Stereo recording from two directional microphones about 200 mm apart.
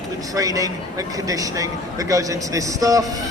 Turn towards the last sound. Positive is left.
turn(degrees=-15)  # may be behind; listen again after turning